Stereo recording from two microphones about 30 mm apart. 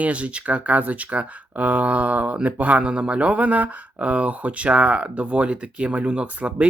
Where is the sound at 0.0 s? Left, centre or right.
Right.